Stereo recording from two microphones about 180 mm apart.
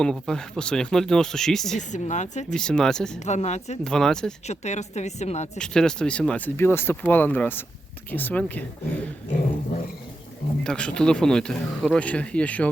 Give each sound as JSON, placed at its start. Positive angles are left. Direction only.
{"t": 0.0, "sound": "speech", "side_deg": 5}
{"t": 1.9, "sound": "a woman's voice", "side_deg": 40}
{"t": 2.5, "sound": "speech", "side_deg": 5}
{"t": 3.2, "sound": "a woman's voice", "side_deg": 40}
{"t": 3.8, "sound": "speech", "side_deg": 5}
{"t": 4.4, "sound": "a woman's voice", "side_deg": 40}
{"t": 5.5, "sound": "speech", "side_deg": 5}
{"t": 10.6, "sound": "speech", "side_deg": 5}